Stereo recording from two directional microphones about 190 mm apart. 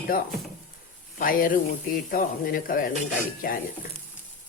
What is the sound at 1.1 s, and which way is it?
A woman's voice, 50° left (ahead or behind).